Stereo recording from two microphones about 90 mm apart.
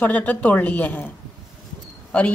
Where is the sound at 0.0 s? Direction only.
20° left (ahead or behind).